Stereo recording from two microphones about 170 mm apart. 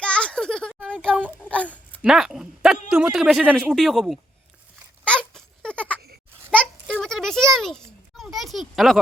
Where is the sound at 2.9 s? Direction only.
5° right (ahead or behind).